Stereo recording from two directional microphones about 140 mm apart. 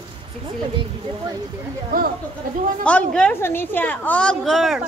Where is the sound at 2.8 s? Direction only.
5° left (ahead or behind).